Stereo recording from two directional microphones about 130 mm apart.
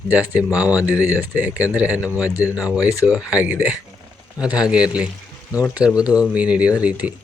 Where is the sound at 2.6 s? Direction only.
10° right (ahead or behind).